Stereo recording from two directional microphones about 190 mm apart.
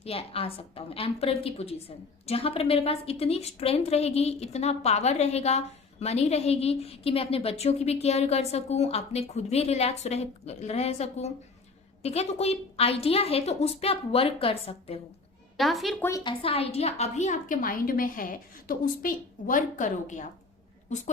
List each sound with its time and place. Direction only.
0.0 s a woman's voice: 30° left (ahead or behind)
15.5 s a woman's voice: centre (ahead or behind)
16.0 s a woman's voice: 20° left (ahead or behind); by 20.2 s 40° left (ahead or behind)